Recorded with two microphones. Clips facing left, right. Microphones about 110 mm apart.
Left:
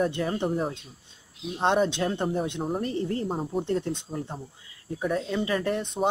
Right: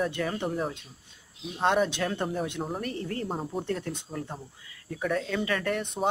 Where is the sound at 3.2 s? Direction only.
Centre (ahead or behind).